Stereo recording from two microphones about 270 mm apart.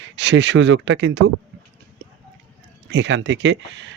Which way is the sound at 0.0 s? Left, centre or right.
Right.